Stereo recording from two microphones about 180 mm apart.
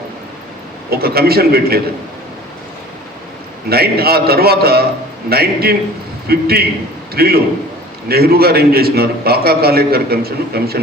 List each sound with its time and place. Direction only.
0.9 s a man's voice: 60° right (ahead or behind)
3.7 s a man's voice: 60° right (ahead or behind)